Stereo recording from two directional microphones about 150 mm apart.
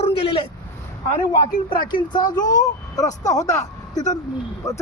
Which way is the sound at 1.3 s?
30° left (ahead or behind).